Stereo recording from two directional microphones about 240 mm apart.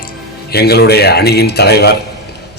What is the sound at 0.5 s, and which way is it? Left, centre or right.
A man's voice, left.